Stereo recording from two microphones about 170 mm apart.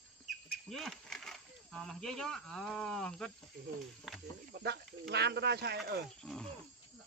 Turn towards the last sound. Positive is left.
turn(degrees=-75)  # may be behind; listen again after turning